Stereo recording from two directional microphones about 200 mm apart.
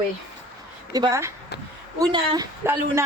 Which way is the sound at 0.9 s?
15° right (ahead or behind).